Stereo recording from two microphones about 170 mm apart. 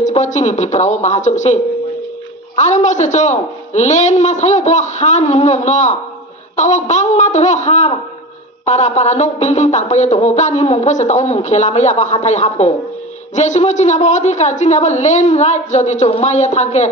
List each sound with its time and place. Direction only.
0.0 s speech: 45° left (ahead or behind)